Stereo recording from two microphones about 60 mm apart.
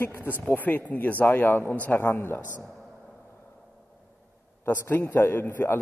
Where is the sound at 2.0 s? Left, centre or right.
Left.